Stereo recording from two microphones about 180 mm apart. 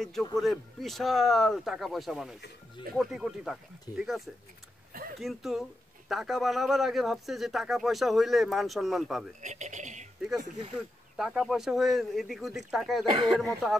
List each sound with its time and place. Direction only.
0.0 s speech: centre (ahead or behind)
5.2 s speech: centre (ahead or behind)
9.4 s speech: 40° right (ahead or behind)
11.1 s speech: centre (ahead or behind)